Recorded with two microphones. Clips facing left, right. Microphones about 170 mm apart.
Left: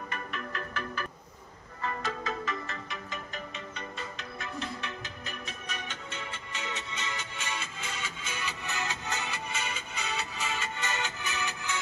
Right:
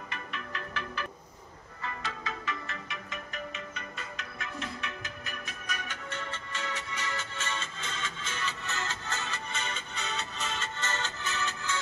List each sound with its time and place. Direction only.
0.1 s music: 45° left (ahead or behind); by 11.8 s 15° left (ahead or behind)